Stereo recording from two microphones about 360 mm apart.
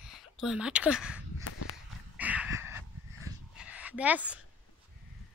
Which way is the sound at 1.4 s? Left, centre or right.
Left.